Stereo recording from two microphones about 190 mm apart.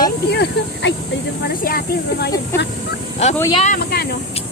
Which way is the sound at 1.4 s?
50° left (ahead or behind).